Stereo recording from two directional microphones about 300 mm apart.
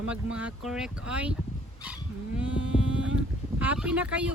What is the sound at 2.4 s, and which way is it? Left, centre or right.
Livestock, centre.